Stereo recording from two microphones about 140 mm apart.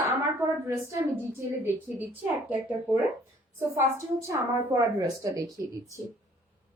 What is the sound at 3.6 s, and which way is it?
A woman's voice, 15° right (ahead or behind).